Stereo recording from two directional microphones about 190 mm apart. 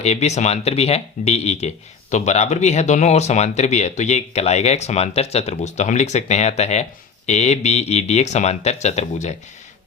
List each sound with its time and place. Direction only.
0.0 s speech: 35° left (ahead or behind)